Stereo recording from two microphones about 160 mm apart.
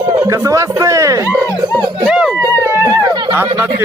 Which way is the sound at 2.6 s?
15° right (ahead or behind).